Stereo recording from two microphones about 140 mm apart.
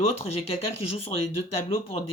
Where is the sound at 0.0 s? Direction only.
45° left (ahead or behind).